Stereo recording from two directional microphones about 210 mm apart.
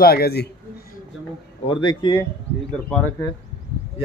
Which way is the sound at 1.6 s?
25° left (ahead or behind).